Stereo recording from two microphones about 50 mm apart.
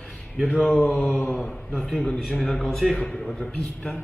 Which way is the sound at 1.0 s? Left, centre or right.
Left.